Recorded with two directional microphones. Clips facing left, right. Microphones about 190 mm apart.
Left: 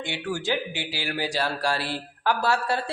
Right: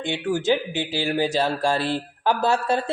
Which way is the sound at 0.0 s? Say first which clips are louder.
Right 6 dB; 20° right (ahead or behind).